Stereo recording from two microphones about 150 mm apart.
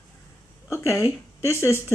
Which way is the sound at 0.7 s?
20° left (ahead or behind).